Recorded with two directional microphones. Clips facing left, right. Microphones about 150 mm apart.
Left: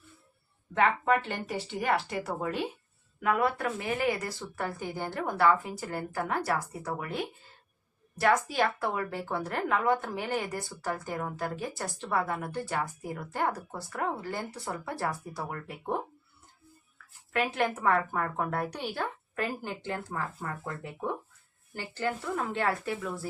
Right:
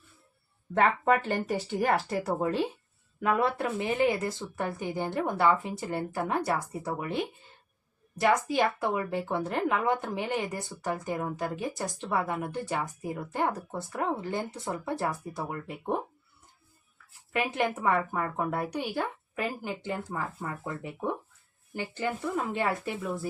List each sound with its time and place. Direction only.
0.7 s speech: 45° right (ahead or behind)
2.2 s speech: 30° right (ahead or behind)
8.2 s speech: 20° right (ahead or behind)
17.3 s a woman's voice: 15° right (ahead or behind)